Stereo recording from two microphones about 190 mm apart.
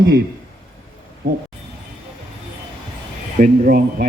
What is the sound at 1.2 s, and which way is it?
Speech, 45° right (ahead or behind).